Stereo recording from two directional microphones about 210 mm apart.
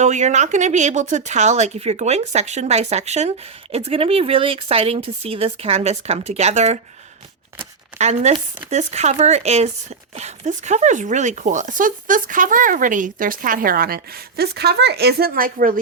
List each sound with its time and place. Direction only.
0.0 s speech: 35° right (ahead or behind)
7.9 s speech: 30° right (ahead or behind)